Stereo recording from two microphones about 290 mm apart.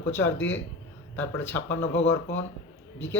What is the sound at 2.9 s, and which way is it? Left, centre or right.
Speech, centre.